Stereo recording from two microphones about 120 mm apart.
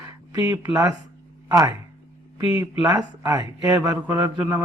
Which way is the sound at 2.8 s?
30° right (ahead or behind).